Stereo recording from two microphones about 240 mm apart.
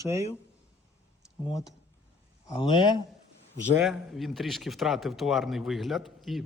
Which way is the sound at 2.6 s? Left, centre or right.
Centre.